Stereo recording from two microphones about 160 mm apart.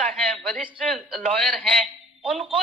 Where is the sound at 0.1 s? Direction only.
5° left (ahead or behind).